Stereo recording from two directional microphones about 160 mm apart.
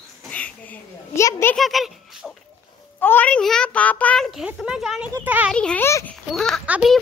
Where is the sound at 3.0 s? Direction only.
10° left (ahead or behind); by 5.5 s 10° right (ahead or behind).